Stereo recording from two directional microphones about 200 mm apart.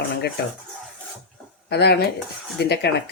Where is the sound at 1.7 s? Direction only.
55° left (ahead or behind).